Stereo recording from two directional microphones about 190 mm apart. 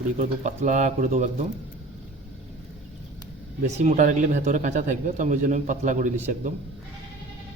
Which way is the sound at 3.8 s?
40° right (ahead or behind).